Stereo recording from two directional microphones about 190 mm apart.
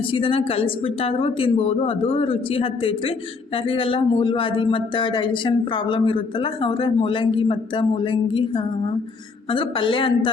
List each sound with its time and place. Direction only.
0.1 s speech: 30° left (ahead or behind)